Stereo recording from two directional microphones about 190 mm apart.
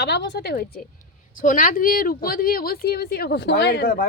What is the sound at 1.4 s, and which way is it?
Speech, 45° left (ahead or behind).